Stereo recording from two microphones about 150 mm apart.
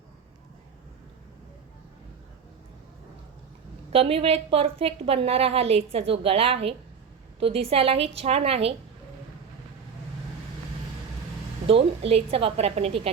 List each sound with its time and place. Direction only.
3.9 s a woman's voice: 40° right (ahead or behind)
11.7 s a woman's voice: 40° right (ahead or behind)